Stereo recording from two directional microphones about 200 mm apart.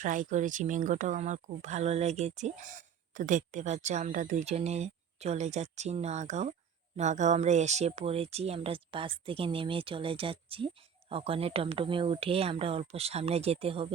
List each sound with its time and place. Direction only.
0.0 s speech: 40° right (ahead or behind)